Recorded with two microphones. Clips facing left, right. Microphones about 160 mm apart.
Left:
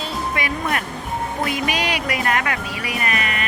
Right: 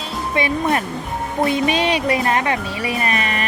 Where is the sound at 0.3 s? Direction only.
25° right (ahead or behind).